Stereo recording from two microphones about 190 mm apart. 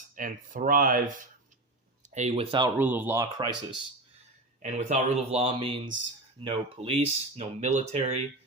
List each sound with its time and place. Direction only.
0.2 s speech: 45° right (ahead or behind); by 2.6 s 30° right (ahead or behind)
2.7 s speech: 10° right (ahead or behind)
4.6 s speech: 40° right (ahead or behind)